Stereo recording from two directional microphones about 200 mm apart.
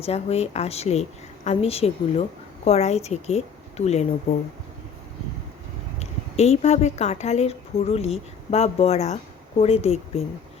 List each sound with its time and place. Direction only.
0.0 s a woman's voice: 30° left (ahead or behind)
6.0 s a woman's voice: 30° left (ahead or behind)